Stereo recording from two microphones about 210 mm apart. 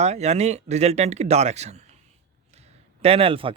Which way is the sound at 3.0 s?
25° right (ahead or behind).